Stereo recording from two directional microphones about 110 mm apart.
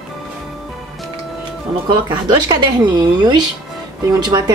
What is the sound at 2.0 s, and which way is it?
A woman's voice, 40° right (ahead or behind).